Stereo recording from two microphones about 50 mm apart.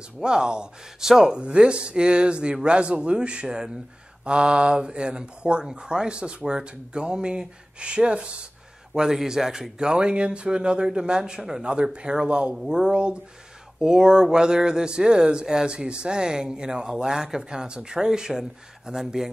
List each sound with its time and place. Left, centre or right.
0.2 s speech: centre